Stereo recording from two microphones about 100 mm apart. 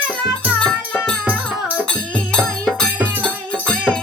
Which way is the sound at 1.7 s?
10° left (ahead or behind).